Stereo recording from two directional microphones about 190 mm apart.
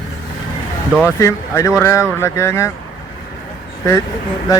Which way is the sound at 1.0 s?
15° left (ahead or behind).